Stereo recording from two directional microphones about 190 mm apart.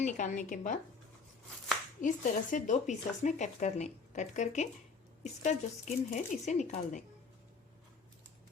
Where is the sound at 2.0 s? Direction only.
40° left (ahead or behind).